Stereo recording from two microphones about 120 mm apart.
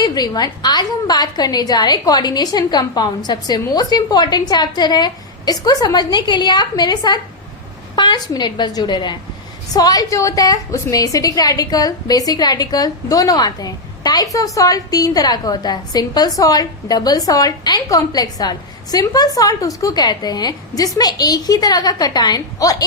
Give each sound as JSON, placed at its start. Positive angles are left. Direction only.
{"t": 0.0, "sound": "a woman's voice", "side_deg": 35}